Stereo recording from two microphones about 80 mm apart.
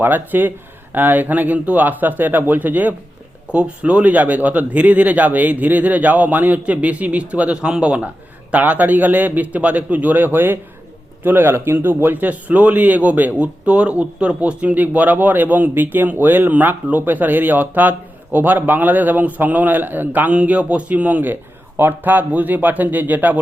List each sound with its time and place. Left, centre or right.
0.0 s speech: right